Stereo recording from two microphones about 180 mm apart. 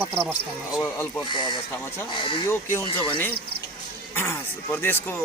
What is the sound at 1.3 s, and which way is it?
Speech, 25° left (ahead or behind).